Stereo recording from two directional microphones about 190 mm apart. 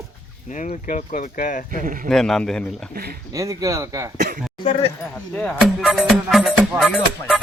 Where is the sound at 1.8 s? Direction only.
45° right (ahead or behind).